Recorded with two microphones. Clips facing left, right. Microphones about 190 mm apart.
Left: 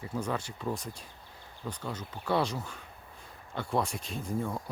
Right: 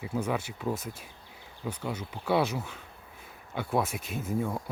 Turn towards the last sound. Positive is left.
turn(degrees=-5)  # may be behind; listen again after turning